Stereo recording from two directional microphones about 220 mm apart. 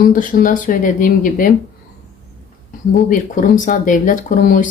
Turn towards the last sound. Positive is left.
turn(degrees=40)  # may be behind; listen again after turning